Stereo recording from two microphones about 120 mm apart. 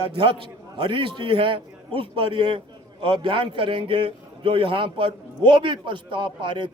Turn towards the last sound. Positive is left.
turn(degrees=-40)  # may be behind; listen again after turning